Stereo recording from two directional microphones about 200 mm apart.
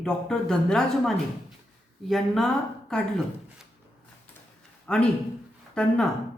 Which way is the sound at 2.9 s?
5° left (ahead or behind).